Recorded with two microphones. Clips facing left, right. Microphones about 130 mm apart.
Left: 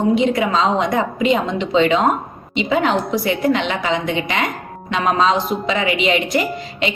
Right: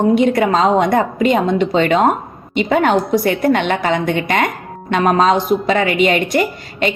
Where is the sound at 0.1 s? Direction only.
50° right (ahead or behind).